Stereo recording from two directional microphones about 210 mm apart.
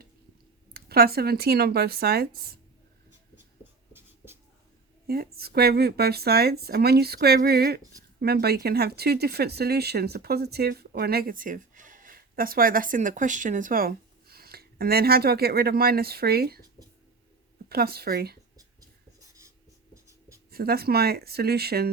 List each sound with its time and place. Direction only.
0.7 s speech: 50° right (ahead or behind)
5.0 s speech: 45° right (ahead or behind)
17.7 s speech: 45° right (ahead or behind)
19.4 s writing: 15° right (ahead or behind)
20.5 s speech: 45° right (ahead or behind)